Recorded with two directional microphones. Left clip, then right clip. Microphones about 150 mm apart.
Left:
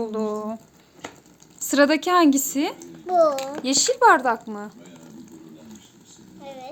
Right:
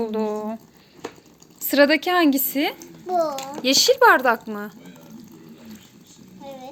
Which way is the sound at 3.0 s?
30° left (ahead or behind).